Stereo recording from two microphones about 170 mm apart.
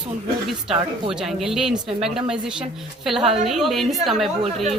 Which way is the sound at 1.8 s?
35° right (ahead or behind).